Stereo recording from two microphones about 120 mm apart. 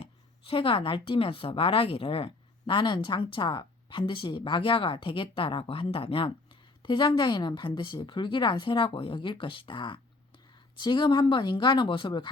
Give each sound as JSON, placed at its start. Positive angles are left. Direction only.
{"t": 0.0, "sound": "speech", "side_deg": 45}